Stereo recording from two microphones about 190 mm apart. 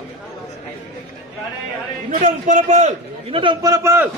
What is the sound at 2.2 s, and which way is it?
A man's voice, 40° right (ahead or behind).